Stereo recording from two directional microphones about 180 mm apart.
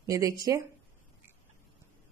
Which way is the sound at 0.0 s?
20° right (ahead or behind).